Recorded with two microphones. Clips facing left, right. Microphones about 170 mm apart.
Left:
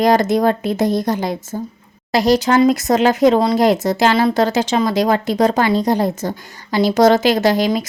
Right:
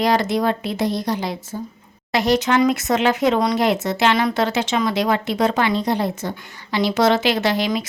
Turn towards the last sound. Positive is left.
turn(degrees=40)  # may be behind; listen again after turning